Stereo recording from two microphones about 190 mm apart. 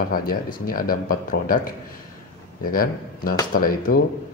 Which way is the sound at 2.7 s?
50° left (ahead or behind).